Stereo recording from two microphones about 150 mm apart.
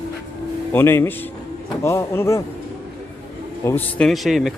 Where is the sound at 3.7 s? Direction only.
10° left (ahead or behind).